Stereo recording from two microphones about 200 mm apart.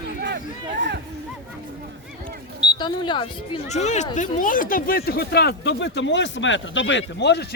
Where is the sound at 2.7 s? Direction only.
20° left (ahead or behind).